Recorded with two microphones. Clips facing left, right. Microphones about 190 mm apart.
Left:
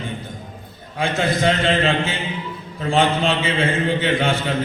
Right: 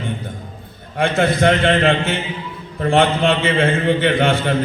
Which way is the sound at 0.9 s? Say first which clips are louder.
Right 4 dB; 60° right (ahead or behind).